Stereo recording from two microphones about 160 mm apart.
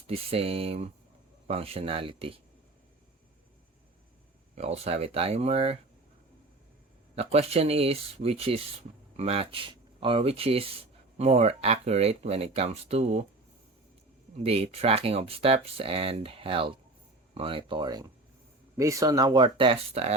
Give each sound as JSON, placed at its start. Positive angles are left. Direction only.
{"t": 0.1, "sound": "speech", "side_deg": -40}
{"t": 4.5, "sound": "speech", "side_deg": -40}
{"t": 7.2, "sound": "speech", "side_deg": -40}
{"t": 14.3, "sound": "speech", "side_deg": -40}